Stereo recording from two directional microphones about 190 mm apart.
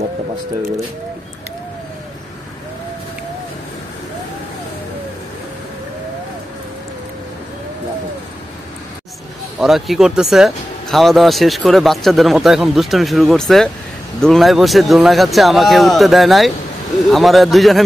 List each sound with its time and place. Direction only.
9.6 s speech: centre (ahead or behind)